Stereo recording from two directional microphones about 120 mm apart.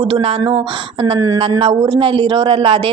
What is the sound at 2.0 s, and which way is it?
Speech, 45° right (ahead or behind).